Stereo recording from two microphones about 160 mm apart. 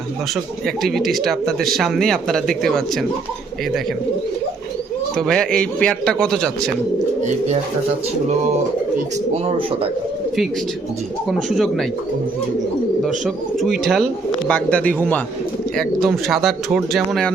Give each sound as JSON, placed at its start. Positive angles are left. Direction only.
{"t": 0.8, "sound": "speech", "side_deg": 0}
{"t": 5.1, "sound": "speech", "side_deg": 5}
{"t": 7.2, "sound": "speech", "side_deg": -50}
{"t": 11.3, "sound": "speech", "side_deg": 0}
{"t": 13.0, "sound": "speech", "side_deg": 0}